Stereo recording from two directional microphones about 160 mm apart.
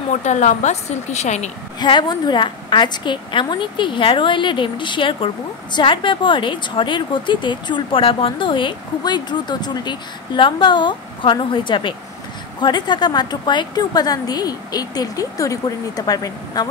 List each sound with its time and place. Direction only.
0.1 s a woman's voice: 50° left (ahead or behind)
1.8 s a woman's voice: 25° left (ahead or behind)